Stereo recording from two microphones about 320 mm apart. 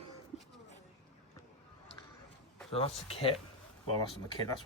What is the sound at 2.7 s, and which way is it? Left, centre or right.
Speech, centre.